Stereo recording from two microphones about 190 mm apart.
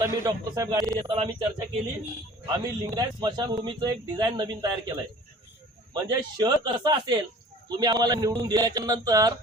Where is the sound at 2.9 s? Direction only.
20° right (ahead or behind).